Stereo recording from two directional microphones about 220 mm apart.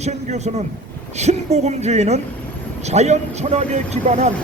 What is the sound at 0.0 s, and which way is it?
A man's voice, 30° right (ahead or behind).